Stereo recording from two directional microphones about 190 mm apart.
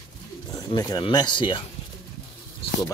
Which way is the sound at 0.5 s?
20° left (ahead or behind).